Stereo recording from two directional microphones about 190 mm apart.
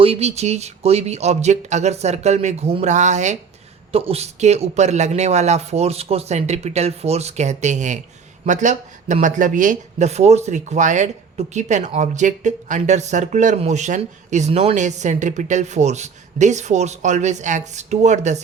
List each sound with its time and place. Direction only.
0.0 s speech: 35° right (ahead or behind)